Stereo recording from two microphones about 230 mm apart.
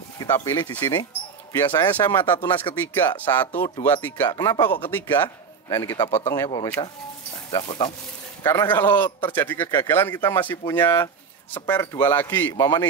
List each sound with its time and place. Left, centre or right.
0.2 s speech: centre
1.9 s a man's voice: centre
5.8 s a man's voice: centre
8.5 s a man's voice: centre